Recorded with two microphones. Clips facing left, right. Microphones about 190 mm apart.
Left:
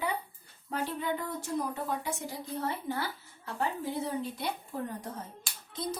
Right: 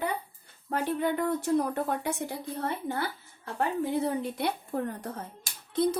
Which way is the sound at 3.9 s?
60° right (ahead or behind).